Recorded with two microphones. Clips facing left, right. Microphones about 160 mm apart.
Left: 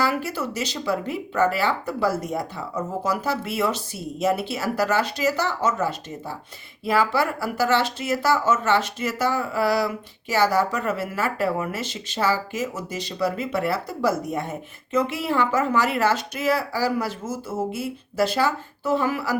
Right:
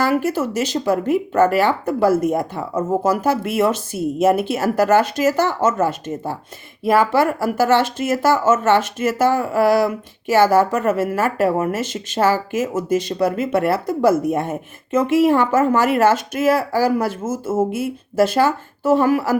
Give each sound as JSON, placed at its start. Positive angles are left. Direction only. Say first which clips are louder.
{"t": 0.0, "sound": "speech", "louder": "right 6 dB", "side_deg": -50}